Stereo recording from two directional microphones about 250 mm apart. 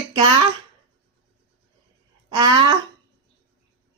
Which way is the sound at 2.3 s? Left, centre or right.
Centre.